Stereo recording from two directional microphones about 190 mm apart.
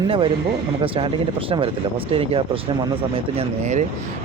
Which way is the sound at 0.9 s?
25° right (ahead or behind).